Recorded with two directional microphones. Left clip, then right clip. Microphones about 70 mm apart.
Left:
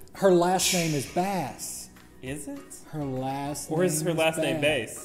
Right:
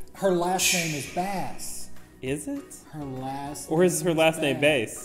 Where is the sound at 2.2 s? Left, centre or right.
Right.